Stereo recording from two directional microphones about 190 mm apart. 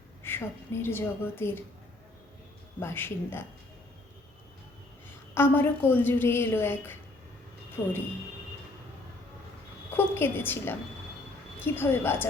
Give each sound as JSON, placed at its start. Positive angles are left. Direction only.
{"t": 0.2, "sound": "a woman's voice", "side_deg": 10}
{"t": 2.8, "sound": "a woman's voice", "side_deg": 10}
{"t": 5.0, "sound": "a woman's voice", "side_deg": 10}
{"t": 9.9, "sound": "a woman's voice", "side_deg": 10}